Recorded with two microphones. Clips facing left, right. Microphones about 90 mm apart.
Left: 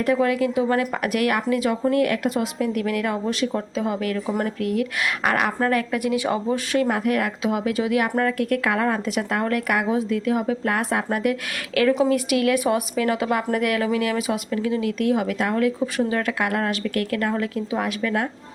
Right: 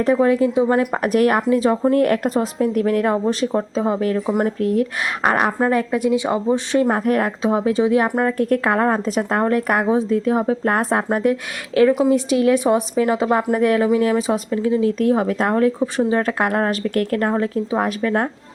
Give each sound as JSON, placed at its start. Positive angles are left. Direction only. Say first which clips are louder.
{"t": 0.0, "sound": "a woman's voice", "louder": "right 4 dB", "side_deg": -30}
{"t": 1.0, "sound": "a woman's voice", "louder": "right 5 dB", "side_deg": -35}
{"t": 4.3, "sound": "a woman's voice", "louder": "right 5 dB", "side_deg": -20}
{"t": 4.6, "sound": "a woman's voice", "louder": "right 4 dB", "side_deg": -35}
{"t": 11.9, "sound": "speech", "louder": "right 3 dB", "side_deg": -15}
{"t": 12.1, "sound": "a woman's voice", "louder": "right 4 dB", "side_deg": -30}